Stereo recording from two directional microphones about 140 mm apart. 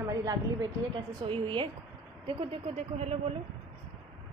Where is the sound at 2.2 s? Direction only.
45° right (ahead or behind).